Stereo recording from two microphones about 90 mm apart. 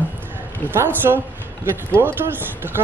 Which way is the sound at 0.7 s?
25° right (ahead or behind).